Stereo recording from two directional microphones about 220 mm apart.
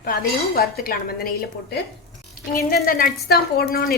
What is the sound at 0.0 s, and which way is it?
A woman's voice, 40° left (ahead or behind).